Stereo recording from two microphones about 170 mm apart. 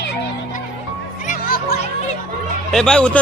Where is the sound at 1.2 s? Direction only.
55° left (ahead or behind).